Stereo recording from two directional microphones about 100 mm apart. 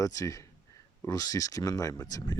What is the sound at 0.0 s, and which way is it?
Speech, 35° left (ahead or behind).